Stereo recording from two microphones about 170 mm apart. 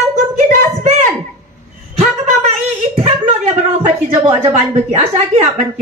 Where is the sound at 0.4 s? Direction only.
40° right (ahead or behind).